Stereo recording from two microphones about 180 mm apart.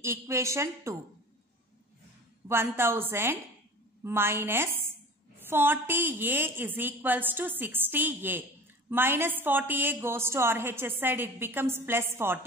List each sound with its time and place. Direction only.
0.0 s a woman's voice: 15° right (ahead or behind)
2.4 s a woman's voice: 15° right (ahead or behind)